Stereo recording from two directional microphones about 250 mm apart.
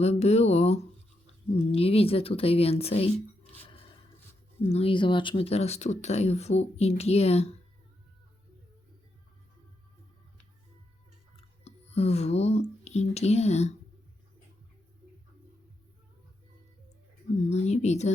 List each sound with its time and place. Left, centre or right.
0.0 s a sound: left
1.5 s speech: left
4.6 s speech: left
11.6 s speech: left
17.5 s speech: left